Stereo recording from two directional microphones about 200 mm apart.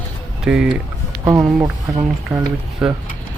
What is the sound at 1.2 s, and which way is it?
Speech, 15° right (ahead or behind).